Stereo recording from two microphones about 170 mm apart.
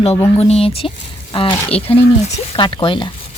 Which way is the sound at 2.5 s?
30° left (ahead or behind).